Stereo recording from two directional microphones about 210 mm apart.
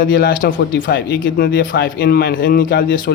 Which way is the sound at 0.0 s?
45° left (ahead or behind).